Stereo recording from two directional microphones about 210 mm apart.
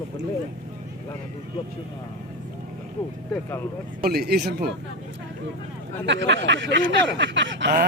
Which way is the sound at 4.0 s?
45° right (ahead or behind).